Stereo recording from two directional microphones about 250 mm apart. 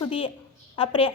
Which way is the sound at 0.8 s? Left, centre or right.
Left.